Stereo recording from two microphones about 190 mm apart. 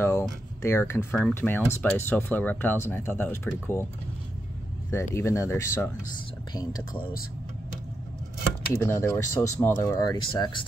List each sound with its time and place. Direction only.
0.7 s speech: 10° left (ahead or behind)
4.9 s speech: 15° left (ahead or behind)
8.8 s speech: 15° left (ahead or behind)